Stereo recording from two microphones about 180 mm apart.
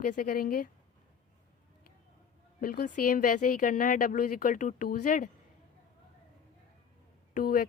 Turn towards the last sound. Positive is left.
turn(degrees=55)  # may be behind; listen again after turning